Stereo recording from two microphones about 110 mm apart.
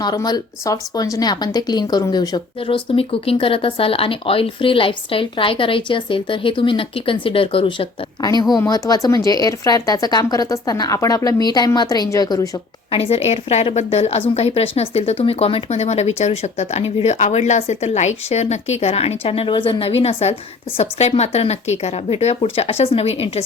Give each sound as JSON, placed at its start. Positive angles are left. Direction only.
{"t": 0.0, "sound": "speech", "side_deg": 40}
{"t": 2.6, "sound": "speech", "side_deg": 55}
{"t": 8.2, "sound": "speech", "side_deg": 40}
{"t": 12.9, "sound": "a woman's voice", "side_deg": 60}
{"t": 20.7, "sound": "a woman's voice", "side_deg": 75}